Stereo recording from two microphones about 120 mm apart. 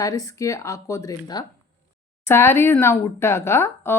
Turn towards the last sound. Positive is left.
turn(degrees=20)  # may be behind; listen again after turning